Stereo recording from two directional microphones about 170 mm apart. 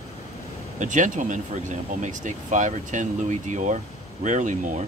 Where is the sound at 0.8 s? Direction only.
45° right (ahead or behind).